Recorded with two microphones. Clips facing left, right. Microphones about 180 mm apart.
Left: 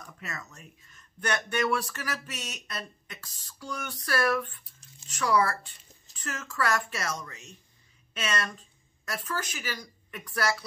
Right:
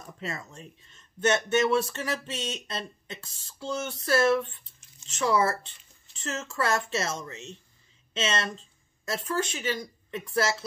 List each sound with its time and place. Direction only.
0.0 s speech: 25° right (ahead or behind)